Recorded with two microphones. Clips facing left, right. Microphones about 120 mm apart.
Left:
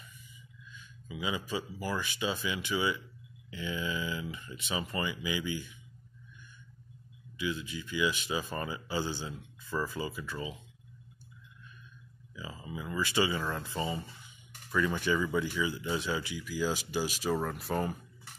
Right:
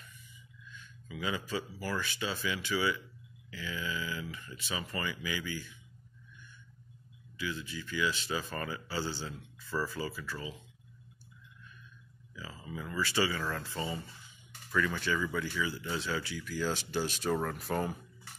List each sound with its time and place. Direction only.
0.7 s speech: 15° left (ahead or behind)
7.3 s speech: 20° left (ahead or behind)
12.4 s speech: 15° left (ahead or behind); by 17.9 s centre (ahead or behind)